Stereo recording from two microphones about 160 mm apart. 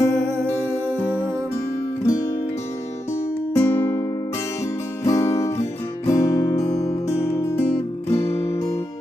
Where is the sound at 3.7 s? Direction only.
15° left (ahead or behind).